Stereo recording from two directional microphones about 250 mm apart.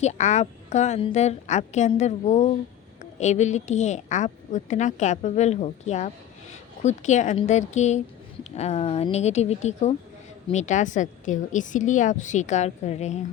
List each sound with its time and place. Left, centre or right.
0.0 s a woman's voice: left